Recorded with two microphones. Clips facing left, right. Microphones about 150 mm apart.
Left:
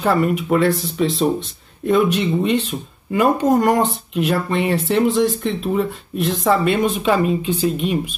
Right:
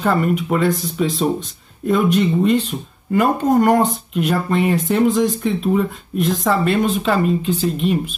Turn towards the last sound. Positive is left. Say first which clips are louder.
# right 2 dB
turn(degrees=5)  # may be behind; listen again after turning